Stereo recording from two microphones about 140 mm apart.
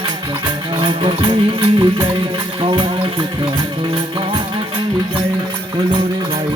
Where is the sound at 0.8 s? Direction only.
35° right (ahead or behind).